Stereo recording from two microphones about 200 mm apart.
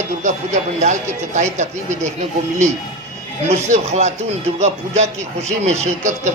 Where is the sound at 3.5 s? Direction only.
35° right (ahead or behind).